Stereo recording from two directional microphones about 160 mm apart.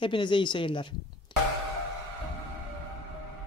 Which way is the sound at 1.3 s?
30° left (ahead or behind).